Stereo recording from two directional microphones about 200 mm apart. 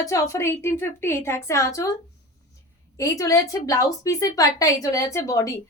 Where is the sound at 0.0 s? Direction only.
15° left (ahead or behind).